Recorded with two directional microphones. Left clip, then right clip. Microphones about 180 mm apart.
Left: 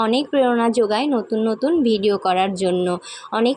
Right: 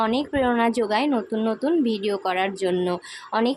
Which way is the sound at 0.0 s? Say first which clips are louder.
Left 5 dB; 15° left (ahead or behind).